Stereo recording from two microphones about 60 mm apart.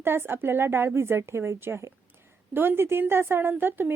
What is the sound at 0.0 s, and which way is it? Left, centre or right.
A woman's voice, right.